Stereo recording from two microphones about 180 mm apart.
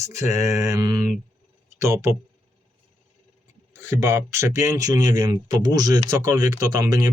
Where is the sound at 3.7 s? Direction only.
15° right (ahead or behind).